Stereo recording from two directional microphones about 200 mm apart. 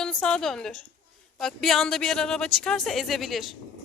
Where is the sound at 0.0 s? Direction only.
5° left (ahead or behind).